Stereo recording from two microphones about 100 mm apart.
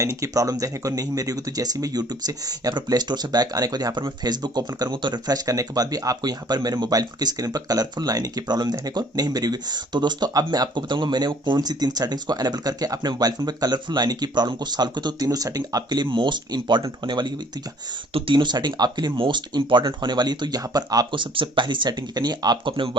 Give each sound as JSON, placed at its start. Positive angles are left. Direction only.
{"t": 0.2, "sound": "speech", "side_deg": -35}
{"t": 21.1, "sound": "speech", "side_deg": -55}